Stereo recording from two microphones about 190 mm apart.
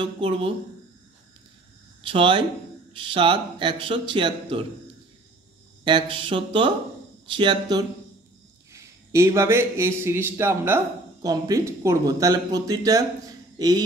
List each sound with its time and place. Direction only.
0.0 s speech: 30° right (ahead or behind)
2.0 s speech: 25° right (ahead or behind)
5.9 s speech: 25° right (ahead or behind)